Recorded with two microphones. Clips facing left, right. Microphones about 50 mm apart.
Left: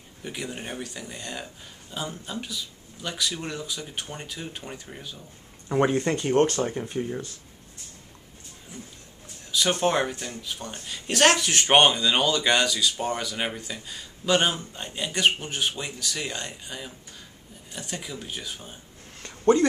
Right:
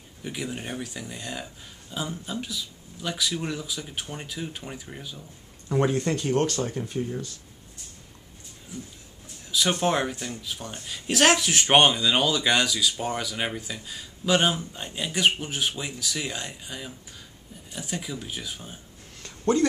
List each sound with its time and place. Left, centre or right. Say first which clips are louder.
0.2 s speech: right 1 dB; centre
5.7 s speech: left 1 dB; centre
9.5 s speech: even; centre
19.2 s a sound: left 4 dB; centre